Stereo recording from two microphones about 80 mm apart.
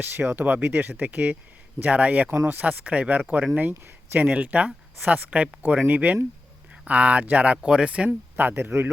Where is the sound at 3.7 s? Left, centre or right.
Right; by 8.1 s centre.